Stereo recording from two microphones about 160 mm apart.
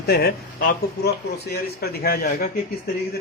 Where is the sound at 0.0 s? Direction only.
80° left; by 2.9 s 65° left (ahead or behind).